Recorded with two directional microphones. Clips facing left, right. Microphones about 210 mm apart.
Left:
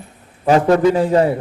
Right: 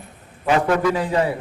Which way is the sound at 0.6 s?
30° left (ahead or behind).